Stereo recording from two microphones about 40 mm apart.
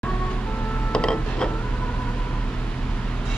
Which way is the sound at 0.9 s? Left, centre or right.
Centre.